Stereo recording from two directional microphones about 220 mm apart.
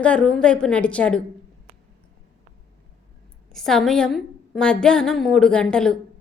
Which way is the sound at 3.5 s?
Centre (ahead or behind).